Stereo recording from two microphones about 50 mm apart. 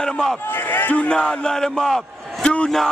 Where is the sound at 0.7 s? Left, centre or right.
Left.